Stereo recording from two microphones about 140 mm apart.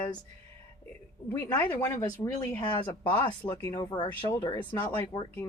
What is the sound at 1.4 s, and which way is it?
Speech, 20° left (ahead or behind).